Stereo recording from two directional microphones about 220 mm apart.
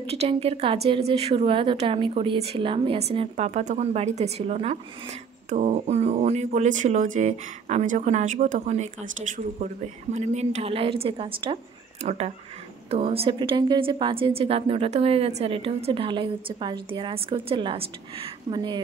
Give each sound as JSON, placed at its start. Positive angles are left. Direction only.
{"t": 0.0, "sound": "a woman's voice", "side_deg": -25}
{"t": 10.1, "sound": "a woman's voice", "side_deg": -30}